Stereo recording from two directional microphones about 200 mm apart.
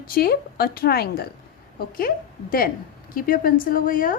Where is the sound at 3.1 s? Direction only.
45° left (ahead or behind).